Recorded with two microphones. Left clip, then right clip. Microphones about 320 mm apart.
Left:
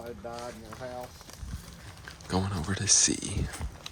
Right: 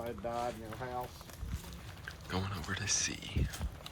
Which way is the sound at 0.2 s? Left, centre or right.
Right.